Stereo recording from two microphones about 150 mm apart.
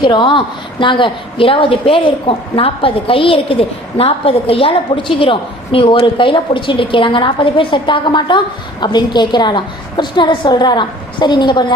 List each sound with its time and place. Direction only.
0.0 s a woman's voice: 30° left (ahead or behind)